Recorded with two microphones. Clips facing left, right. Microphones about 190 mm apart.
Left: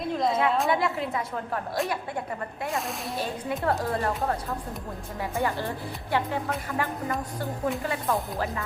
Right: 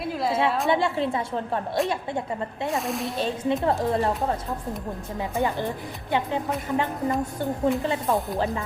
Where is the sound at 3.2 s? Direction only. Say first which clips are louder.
Right 5 dB; 20° right (ahead or behind).